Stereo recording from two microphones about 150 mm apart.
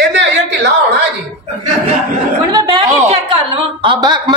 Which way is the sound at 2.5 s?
25° right (ahead or behind).